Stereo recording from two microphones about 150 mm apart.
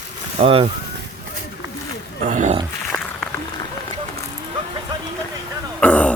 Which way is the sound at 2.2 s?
55° right (ahead or behind).